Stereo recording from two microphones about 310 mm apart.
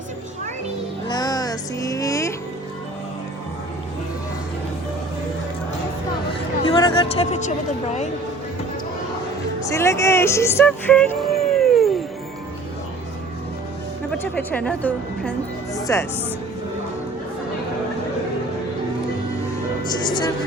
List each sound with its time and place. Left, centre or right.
1.0 s music: centre
6.7 s speech: centre
9.6 s speech: centre
14.1 s a woman's voice: centre